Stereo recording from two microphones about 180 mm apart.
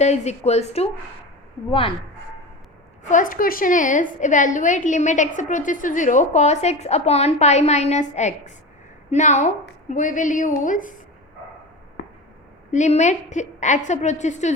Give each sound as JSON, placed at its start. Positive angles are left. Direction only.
{"t": 0.0, "sound": "a woman's voice", "side_deg": 35}
{"t": 3.1, "sound": "a woman's voice", "side_deg": 45}
{"t": 12.7, "sound": "a woman's voice", "side_deg": 40}